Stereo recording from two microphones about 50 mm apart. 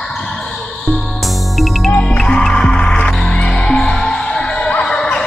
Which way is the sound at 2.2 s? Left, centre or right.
Centre.